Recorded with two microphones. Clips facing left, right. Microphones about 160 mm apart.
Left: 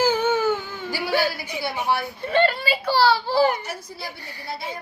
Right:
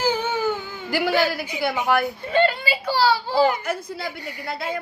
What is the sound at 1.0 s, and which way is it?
Speech, 70° right (ahead or behind).